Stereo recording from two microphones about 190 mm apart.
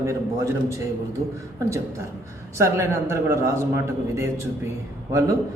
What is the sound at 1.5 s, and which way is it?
A man's voice, 15° right (ahead or behind).